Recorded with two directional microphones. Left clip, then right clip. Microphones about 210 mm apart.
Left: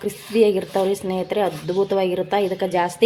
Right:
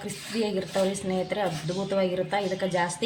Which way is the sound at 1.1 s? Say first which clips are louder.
Left 6 dB; 35° left (ahead or behind).